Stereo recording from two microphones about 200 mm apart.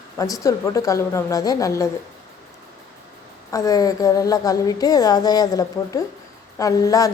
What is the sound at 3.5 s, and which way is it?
A woman's voice, 15° left (ahead or behind).